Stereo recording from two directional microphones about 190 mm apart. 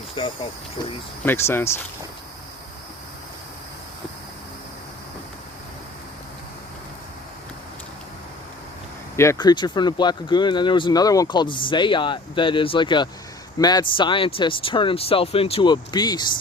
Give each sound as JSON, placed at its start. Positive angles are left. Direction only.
{"t": 0.2, "sound": "speech", "side_deg": 25}
{"t": 1.2, "sound": "speech", "side_deg": 10}
{"t": 9.1, "sound": "speech", "side_deg": 15}